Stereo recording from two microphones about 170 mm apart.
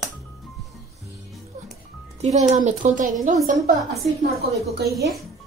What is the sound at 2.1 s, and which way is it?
A woman's voice, 45° right (ahead or behind).